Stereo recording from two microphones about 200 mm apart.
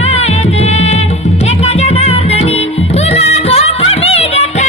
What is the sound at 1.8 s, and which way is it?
Music, 30° left (ahead or behind).